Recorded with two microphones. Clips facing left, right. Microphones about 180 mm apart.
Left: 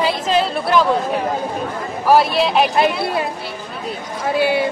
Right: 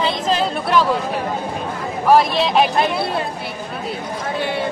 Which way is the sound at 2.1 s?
5° left (ahead or behind).